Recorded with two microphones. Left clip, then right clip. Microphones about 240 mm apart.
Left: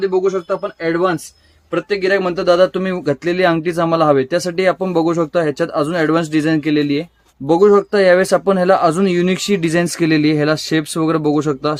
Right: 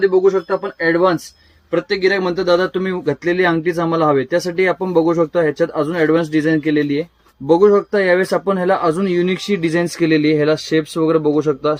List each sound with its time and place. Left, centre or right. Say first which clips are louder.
0.8 s speech: right 4 dB; left